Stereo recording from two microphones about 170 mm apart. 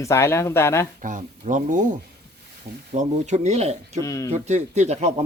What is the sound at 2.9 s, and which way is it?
Speech, 45° right (ahead or behind).